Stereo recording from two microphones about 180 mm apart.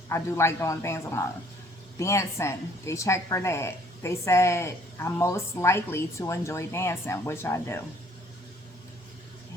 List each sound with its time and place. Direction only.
0.1 s a woman's voice: 15° left (ahead or behind)